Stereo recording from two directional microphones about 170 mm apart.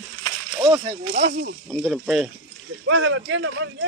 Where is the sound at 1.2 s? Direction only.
90° right.